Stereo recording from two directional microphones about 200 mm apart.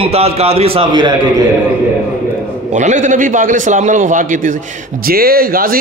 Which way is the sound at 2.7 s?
35° right (ahead or behind).